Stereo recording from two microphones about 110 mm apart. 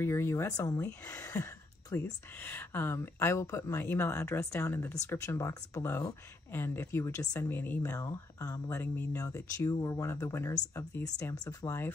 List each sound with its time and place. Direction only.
0.0 s speech: 25° left (ahead or behind)
0.5 s speech: 35° left (ahead or behind)
2.0 s speech: 15° left (ahead or behind)
8.8 s speech: 15° left (ahead or behind)
9.7 s speech: 30° left (ahead or behind)
11.3 s speech: 35° left (ahead or behind)